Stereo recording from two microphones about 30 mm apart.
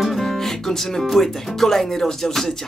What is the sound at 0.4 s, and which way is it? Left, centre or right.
Speech, centre.